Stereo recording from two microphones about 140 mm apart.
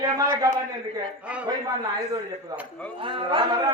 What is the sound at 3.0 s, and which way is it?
Speech, 35° right (ahead or behind).